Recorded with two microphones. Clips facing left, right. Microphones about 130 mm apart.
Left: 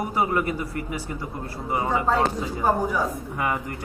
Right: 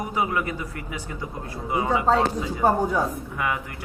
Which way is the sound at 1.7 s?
15° right (ahead or behind).